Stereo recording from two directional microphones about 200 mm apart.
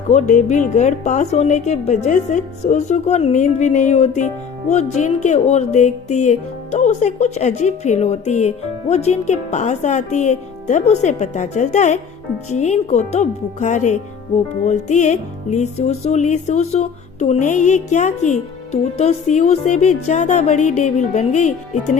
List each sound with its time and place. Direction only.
0.1 s speech: 35° left (ahead or behind)